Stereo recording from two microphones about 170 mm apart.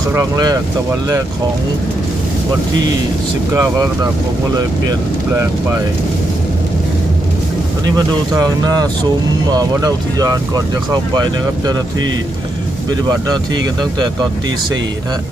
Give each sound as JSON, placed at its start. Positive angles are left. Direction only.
{"t": 0.1, "sound": "speech", "side_deg": -20}
{"t": 3.5, "sound": "speech", "side_deg": -20}
{"t": 7.9, "sound": "speech", "side_deg": -20}